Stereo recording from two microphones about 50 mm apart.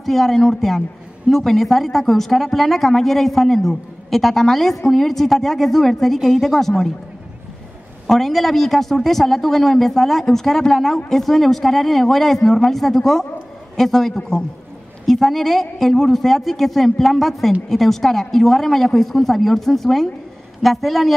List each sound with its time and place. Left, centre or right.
0.0 s a woman's voice: centre
6.1 s a woman's voice: centre
6.4 s a woman's voice: centre
8.1 s a woman's voice: centre